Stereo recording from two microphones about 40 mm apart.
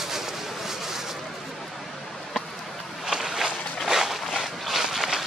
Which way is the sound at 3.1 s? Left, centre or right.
Centre.